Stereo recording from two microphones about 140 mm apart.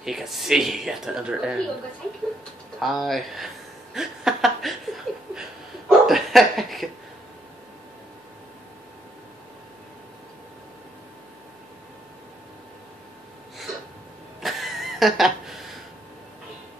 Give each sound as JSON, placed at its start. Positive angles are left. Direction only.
{"t": 0.0, "sound": "speech", "side_deg": 0}
{"t": 2.8, "sound": "speech", "side_deg": 0}
{"t": 3.9, "sound": "laughter", "side_deg": -5}
{"t": 14.4, "sound": "a sound", "side_deg": 0}